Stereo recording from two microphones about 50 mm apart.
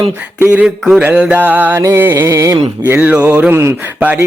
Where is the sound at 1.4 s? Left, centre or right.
Right.